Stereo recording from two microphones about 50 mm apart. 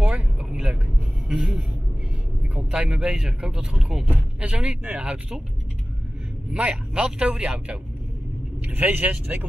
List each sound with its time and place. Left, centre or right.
0.0 s vehicle: right
0.5 s vehicle: centre
1.4 s speech: centre
2.5 s a man's voice: right
5.0 s a man's voice: right
6.5 s a man's voice: right